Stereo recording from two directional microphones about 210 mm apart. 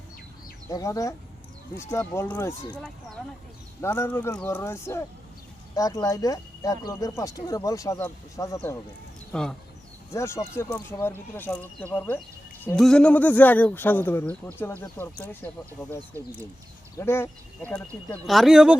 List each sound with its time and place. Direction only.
0.7 s speech: 15° left (ahead or behind)
17.0 s speech: 10° left (ahead or behind)